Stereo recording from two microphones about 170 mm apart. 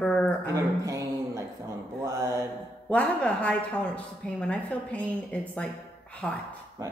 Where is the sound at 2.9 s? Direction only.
10° left (ahead or behind).